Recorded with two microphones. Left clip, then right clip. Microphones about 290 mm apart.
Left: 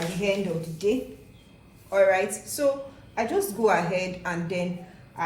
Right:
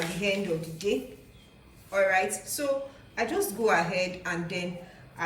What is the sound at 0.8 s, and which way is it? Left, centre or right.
A woman's voice, centre.